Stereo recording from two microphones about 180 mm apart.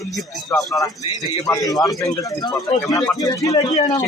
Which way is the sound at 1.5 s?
15° left (ahead or behind).